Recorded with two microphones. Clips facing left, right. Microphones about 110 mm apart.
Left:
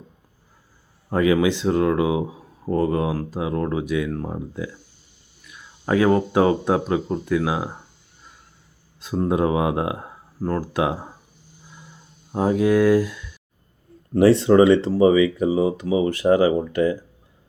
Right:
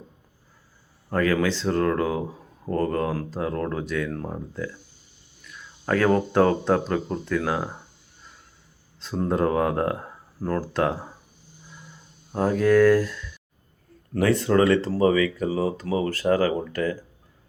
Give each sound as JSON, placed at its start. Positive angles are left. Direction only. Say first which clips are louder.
{"t": 1.1, "sound": "speech", "louder": "left 4 dB", "side_deg": 15}
{"t": 9.0, "sound": "speech", "louder": "left 3 dB", "side_deg": 10}
{"t": 12.3, "sound": "speech", "louder": "left 1 dB", "side_deg": 10}
{"t": 14.1, "sound": "speech", "louder": "left 6 dB", "side_deg": 30}